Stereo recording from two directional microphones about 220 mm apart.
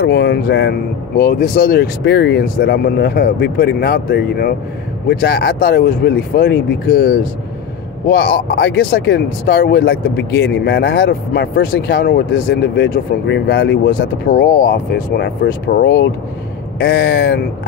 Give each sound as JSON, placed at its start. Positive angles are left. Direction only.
{"t": 0.0, "sound": "speech", "side_deg": 50}